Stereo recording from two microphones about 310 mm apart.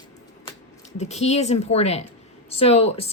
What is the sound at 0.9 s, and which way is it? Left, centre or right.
Speech, left.